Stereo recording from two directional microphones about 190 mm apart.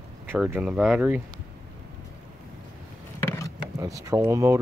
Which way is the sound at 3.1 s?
15° left (ahead or behind).